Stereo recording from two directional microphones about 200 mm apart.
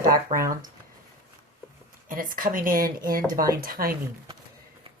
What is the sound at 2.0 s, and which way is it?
Speech, 45° right (ahead or behind).